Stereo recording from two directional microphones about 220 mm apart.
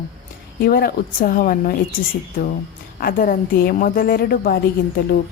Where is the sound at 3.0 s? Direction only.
40° left (ahead or behind).